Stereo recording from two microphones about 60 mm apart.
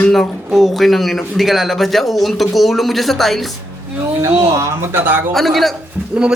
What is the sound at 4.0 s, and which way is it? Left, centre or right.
Speech, right.